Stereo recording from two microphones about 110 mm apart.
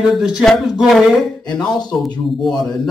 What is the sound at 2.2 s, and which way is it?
Speech, centre (ahead or behind).